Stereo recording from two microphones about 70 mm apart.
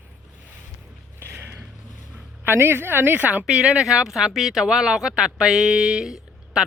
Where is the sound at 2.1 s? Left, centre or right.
Right.